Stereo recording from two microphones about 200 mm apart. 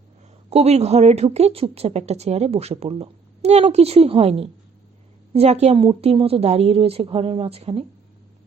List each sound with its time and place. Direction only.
0.5 s a woman's voice: 30° right (ahead or behind)